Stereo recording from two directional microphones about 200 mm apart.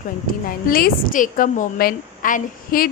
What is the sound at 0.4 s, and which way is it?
A woman's voice, 45° left (ahead or behind).